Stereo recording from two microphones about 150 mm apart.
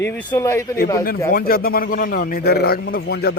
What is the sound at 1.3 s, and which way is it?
A man's voice, 80° left.